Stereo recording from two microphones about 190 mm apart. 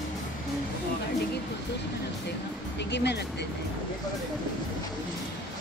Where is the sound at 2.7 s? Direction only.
65° left (ahead or behind).